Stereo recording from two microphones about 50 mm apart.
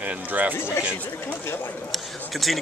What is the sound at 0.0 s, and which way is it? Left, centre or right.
Speech, right.